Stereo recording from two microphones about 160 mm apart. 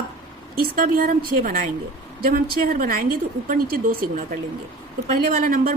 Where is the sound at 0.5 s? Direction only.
65° right (ahead or behind).